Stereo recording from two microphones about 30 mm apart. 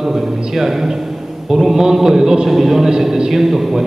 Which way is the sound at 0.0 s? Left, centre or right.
Centre.